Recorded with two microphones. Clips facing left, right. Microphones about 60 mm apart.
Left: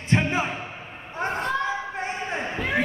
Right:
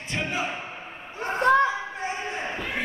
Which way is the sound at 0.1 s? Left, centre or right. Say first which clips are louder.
Left 5 dB; left.